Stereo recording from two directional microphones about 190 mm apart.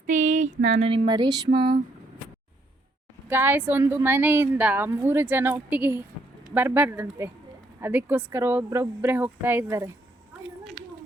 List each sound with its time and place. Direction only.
0.1 s a sound: 40° right (ahead or behind)
0.8 s speech: 30° right (ahead or behind)
3.2 s a woman's voice: 10° right (ahead or behind)